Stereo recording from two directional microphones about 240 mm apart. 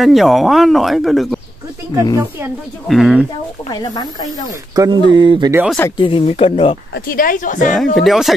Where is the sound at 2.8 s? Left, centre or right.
Centre.